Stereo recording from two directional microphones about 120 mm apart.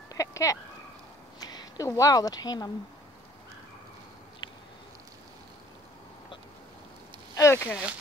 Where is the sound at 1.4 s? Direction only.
35° left (ahead or behind).